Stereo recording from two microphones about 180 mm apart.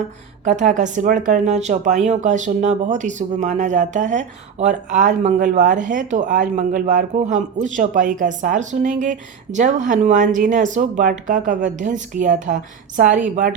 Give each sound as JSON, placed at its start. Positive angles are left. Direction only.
{"t": 0.4, "sound": "speech", "side_deg": -40}